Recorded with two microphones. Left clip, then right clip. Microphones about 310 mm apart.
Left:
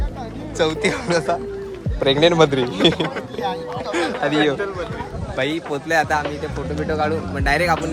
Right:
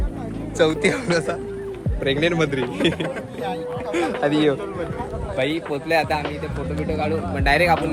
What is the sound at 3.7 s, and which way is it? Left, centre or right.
Speech, left.